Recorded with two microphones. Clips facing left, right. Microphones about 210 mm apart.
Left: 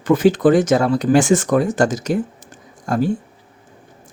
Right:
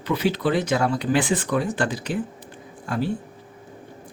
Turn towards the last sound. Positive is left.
turn(degrees=45)  # may be behind; listen again after turning